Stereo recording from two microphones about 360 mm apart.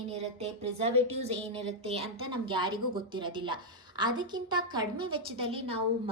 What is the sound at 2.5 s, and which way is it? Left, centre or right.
A woman's voice, centre.